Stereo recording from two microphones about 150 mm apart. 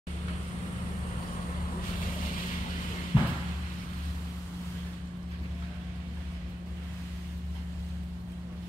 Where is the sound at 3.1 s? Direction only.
35° left (ahead or behind).